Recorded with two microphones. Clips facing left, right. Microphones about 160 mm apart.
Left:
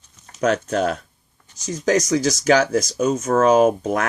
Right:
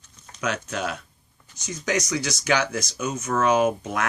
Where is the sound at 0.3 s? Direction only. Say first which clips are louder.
Left 9 dB; 40° left (ahead or behind).